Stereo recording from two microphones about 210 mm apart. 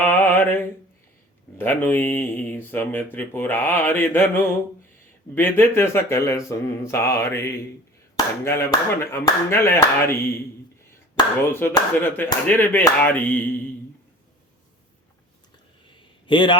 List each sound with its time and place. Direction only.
0.0 s a sound: 10° left (ahead or behind)
1.5 s speech: 10° left (ahead or behind)
11.5 s speech: 10° left (ahead or behind)
16.2 s a man's voice: 25° left (ahead or behind)